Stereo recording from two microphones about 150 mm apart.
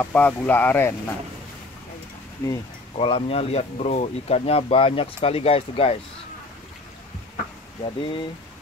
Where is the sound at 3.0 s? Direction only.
40° left (ahead or behind).